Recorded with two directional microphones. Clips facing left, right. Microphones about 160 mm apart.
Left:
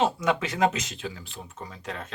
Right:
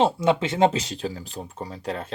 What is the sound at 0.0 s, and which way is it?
Speech, 30° right (ahead or behind).